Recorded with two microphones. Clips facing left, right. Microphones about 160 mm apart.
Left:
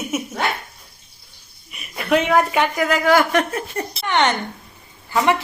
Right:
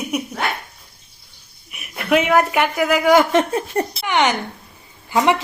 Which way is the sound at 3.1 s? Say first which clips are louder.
Right 3 dB; 20° right (ahead or behind).